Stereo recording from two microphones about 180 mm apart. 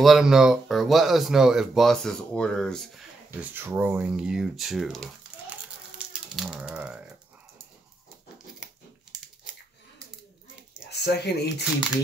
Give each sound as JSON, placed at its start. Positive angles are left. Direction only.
{"t": 0.0, "sound": "speech", "side_deg": 0}
{"t": 3.3, "sound": "speech", "side_deg": -10}
{"t": 5.9, "sound": "a sound", "side_deg": -5}
{"t": 10.9, "sound": "speech", "side_deg": 65}